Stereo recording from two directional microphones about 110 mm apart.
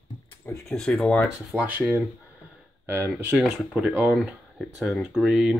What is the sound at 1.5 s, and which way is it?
Speech, 15° right (ahead or behind).